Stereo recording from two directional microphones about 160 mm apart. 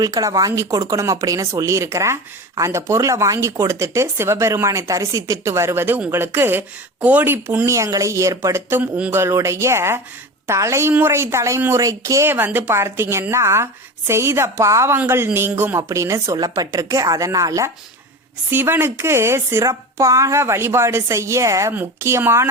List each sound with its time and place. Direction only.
0.0 s speech: 20° right (ahead or behind)